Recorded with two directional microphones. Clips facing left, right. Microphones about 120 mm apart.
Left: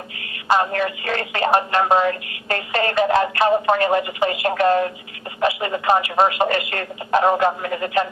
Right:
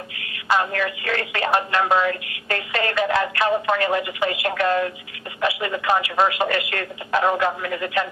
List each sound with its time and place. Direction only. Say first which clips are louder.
0.2 s speech: left 3 dB; 30° left (ahead or behind)